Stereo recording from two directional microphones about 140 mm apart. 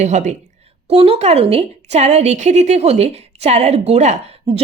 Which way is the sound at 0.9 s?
45° right (ahead or behind).